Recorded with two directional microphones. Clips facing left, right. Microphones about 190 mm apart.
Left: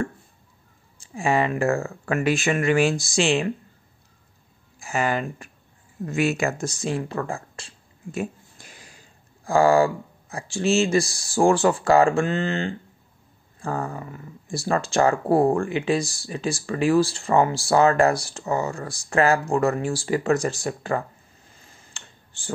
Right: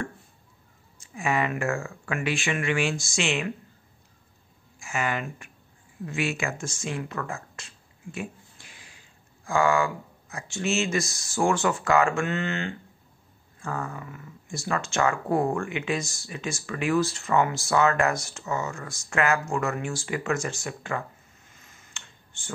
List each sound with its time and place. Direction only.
0.9 s speech: 30° left (ahead or behind)
4.7 s speech: 35° left (ahead or behind)
21.5 s tick: 30° left (ahead or behind)